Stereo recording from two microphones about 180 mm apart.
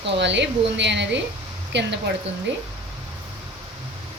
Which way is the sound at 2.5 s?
90° right.